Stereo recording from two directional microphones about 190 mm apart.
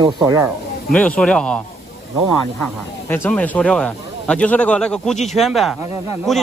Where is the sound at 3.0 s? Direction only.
10° left (ahead or behind).